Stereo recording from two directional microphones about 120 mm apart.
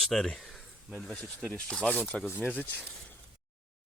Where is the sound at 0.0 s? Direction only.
Centre (ahead or behind).